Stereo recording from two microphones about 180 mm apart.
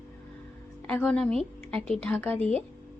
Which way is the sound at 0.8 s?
5° left (ahead or behind).